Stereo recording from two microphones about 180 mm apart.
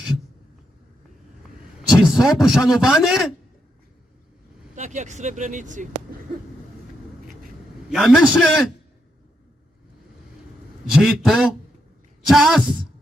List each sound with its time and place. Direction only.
1.9 s a man's voice: 5° right (ahead or behind)
4.7 s speech: 40° right (ahead or behind)
7.9 s a man's voice: centre (ahead or behind)
11.0 s a man's voice: centre (ahead or behind)